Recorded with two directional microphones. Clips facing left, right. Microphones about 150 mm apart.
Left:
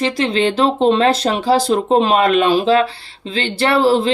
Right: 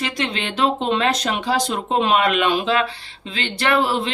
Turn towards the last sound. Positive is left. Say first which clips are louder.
# left 6 dB
turn(degrees=35)  # may be behind; listen again after turning